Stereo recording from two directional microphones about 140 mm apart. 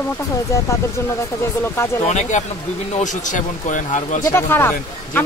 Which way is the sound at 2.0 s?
60° left (ahead or behind).